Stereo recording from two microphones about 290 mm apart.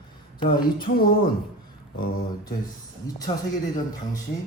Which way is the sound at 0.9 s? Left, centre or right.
Left.